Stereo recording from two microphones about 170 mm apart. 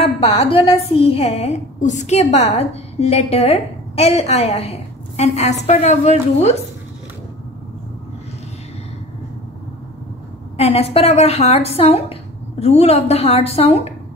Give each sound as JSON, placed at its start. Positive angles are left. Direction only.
{"t": 0.0, "sound": "a woman's voice", "side_deg": 35}
{"t": 10.6, "sound": "a woman's voice", "side_deg": 35}